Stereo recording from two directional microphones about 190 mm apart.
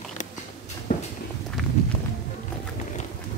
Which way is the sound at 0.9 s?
40° left (ahead or behind).